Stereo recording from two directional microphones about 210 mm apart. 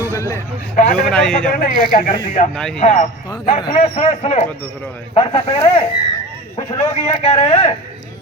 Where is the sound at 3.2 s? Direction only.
20° left (ahead or behind).